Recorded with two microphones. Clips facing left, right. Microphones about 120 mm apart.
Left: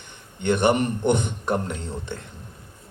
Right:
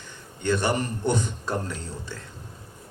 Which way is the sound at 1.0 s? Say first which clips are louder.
Left 4 dB; 60° left (ahead or behind).